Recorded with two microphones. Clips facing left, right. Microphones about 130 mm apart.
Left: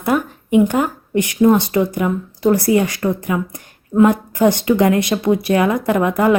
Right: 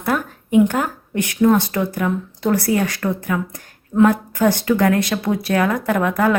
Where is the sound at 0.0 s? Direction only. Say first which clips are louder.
Left 3 dB; 5° left (ahead or behind).